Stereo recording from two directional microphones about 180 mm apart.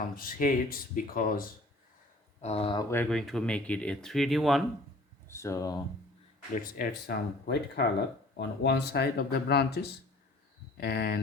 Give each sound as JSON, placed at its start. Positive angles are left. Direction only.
{"t": 0.2, "sound": "speech", "side_deg": 50}
{"t": 2.4, "sound": "speech", "side_deg": 35}
{"t": 2.9, "sound": "speech", "side_deg": 5}
{"t": 5.3, "sound": "speech", "side_deg": 15}
{"t": 6.6, "sound": "speech", "side_deg": 55}